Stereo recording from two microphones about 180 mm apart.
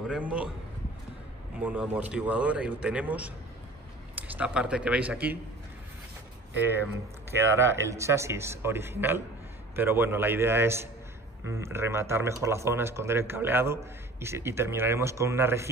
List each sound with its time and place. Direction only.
0.1 s speech: 5° right (ahead or behind)
1.6 s speech: 10° right (ahead or behind)
6.7 s speech: 10° right (ahead or behind)